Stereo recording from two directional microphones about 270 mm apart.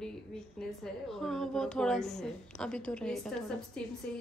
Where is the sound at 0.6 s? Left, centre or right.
Centre.